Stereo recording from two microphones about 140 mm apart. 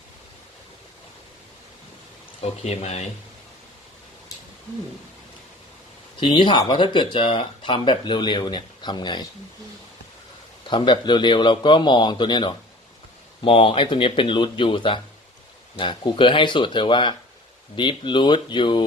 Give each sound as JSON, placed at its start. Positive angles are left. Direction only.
{"t": 2.4, "sound": "speech", "side_deg": 50}
{"t": 6.1, "sound": "speech", "side_deg": 35}
{"t": 10.7, "sound": "speech", "side_deg": 35}